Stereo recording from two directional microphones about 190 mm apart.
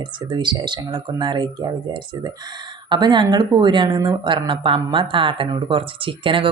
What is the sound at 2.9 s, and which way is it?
Speech, 25° right (ahead or behind).